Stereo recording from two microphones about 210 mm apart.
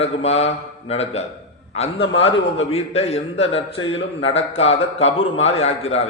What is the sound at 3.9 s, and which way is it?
Speech, 65° left (ahead or behind).